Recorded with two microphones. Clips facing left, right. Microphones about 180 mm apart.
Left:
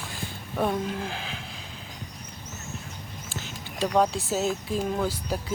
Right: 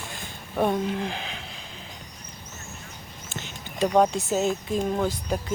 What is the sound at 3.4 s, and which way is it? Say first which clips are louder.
Speech: right 3 dB; centre (ahead or behind).